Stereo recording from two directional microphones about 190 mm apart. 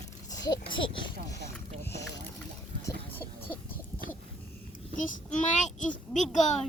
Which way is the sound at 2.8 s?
10° left (ahead or behind).